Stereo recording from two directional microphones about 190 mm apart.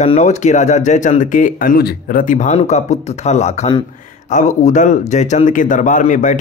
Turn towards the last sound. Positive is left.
turn(degrees=40)  # may be behind; listen again after turning